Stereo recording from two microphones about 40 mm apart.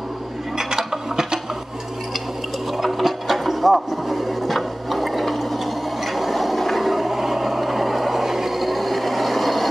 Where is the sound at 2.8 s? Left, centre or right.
Centre.